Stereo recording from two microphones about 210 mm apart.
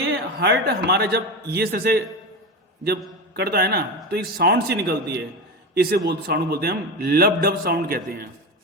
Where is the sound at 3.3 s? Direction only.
50° right (ahead or behind).